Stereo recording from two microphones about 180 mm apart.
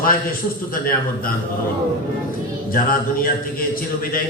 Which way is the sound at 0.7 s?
50° left (ahead or behind).